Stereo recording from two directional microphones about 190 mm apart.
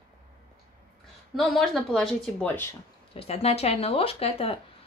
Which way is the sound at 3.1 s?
35° left (ahead or behind).